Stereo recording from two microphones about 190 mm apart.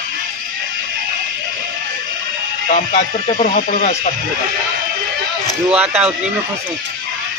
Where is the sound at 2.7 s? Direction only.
40° left (ahead or behind).